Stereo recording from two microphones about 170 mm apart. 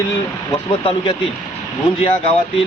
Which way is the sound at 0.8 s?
30° left (ahead or behind).